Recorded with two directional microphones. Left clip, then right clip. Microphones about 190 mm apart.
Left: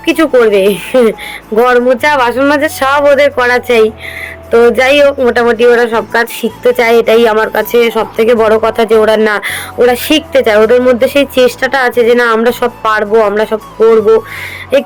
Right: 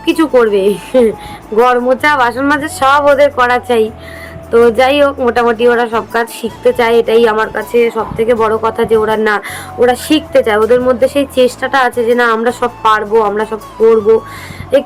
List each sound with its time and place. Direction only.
0.0 s a woman's voice: centre (ahead or behind)
7.5 s speech: 30° left (ahead or behind); by 13.9 s 10° left (ahead or behind)